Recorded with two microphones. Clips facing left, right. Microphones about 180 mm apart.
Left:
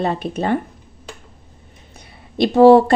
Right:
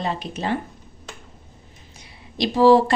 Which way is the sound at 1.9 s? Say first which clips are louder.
Left 7 dB; 55° left (ahead or behind).